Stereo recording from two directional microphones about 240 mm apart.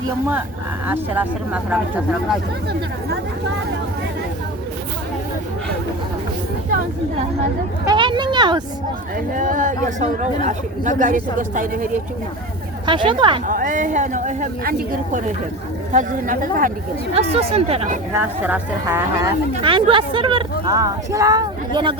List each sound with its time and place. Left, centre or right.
0.9 s speech: centre
7.9 s speech: centre
9.3 s speech: right
12.8 s speech: centre
13.5 s speech: right
18.1 s speech: centre